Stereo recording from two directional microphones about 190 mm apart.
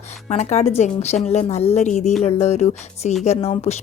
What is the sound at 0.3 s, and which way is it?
A woman's voice, 35° left (ahead or behind).